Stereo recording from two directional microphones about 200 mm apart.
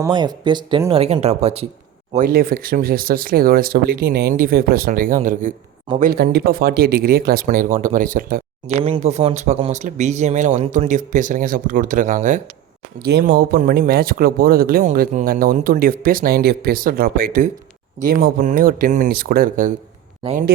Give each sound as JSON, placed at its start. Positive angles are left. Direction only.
{"t": 0.0, "sound": "speech", "side_deg": -20}
{"t": 2.1, "sound": "speech", "side_deg": -45}
{"t": 8.8, "sound": "speech", "side_deg": -30}
{"t": 13.1, "sound": "speech", "side_deg": -50}